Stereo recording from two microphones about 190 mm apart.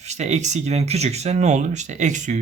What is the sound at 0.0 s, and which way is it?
Speech, 35° right (ahead or behind).